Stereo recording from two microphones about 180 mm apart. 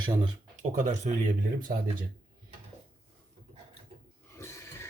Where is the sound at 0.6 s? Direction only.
45° right (ahead or behind).